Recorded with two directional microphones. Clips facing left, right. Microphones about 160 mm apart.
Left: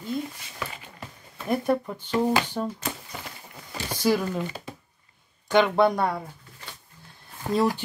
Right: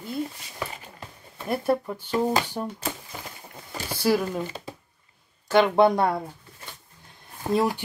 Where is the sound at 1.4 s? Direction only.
5° right (ahead or behind).